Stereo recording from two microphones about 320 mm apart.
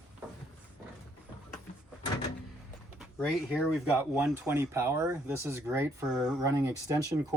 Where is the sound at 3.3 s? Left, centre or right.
Centre.